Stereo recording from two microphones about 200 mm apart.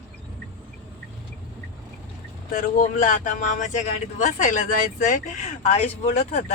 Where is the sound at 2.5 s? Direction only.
40° left (ahead or behind).